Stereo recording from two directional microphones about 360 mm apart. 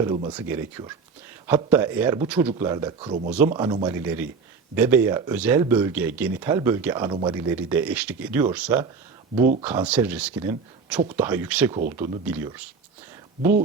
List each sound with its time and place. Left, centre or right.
0.0 s speech: centre
9.4 s speech: right
9.6 s speech: centre